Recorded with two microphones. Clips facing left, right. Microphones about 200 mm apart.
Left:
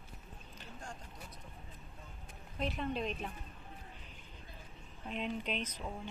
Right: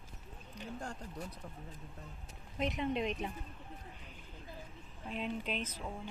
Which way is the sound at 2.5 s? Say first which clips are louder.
Right 2 dB; 20° right (ahead or behind).